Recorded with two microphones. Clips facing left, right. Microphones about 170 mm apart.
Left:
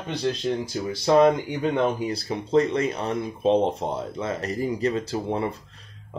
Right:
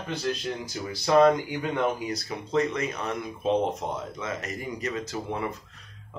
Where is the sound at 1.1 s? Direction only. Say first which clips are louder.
Left 2 dB; 25° left (ahead or behind).